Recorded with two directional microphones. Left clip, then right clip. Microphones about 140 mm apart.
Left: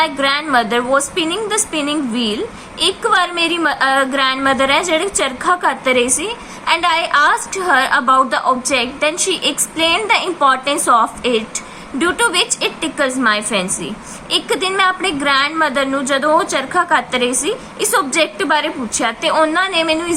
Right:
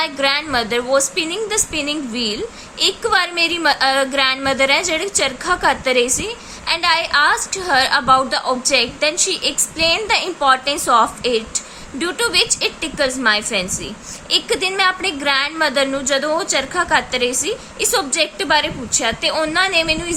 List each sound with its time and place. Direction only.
0.0 s a woman's voice: 35° right (ahead or behind)